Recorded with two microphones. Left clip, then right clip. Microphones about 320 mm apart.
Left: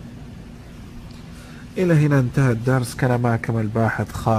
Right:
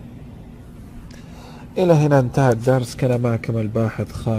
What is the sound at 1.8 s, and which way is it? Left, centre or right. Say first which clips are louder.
Speech: right 5 dB; right.